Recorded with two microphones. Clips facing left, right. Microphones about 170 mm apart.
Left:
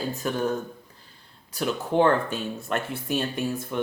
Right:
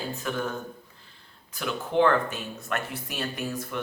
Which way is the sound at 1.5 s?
35° left (ahead or behind).